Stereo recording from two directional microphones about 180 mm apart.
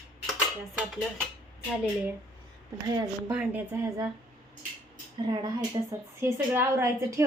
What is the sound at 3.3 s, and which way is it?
Speech, 10° right (ahead or behind).